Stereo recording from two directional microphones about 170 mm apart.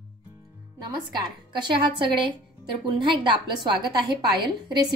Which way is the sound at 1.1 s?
25° right (ahead or behind).